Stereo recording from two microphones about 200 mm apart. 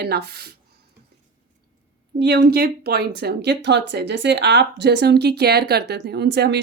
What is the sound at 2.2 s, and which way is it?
Speech, 55° right (ahead or behind).